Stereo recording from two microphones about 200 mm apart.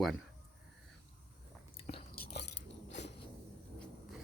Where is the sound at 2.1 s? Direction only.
50° left (ahead or behind).